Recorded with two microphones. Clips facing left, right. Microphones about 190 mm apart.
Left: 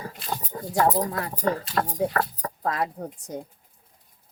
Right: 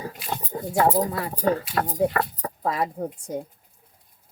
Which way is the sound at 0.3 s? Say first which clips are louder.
Right 5 dB; 20° right (ahead or behind).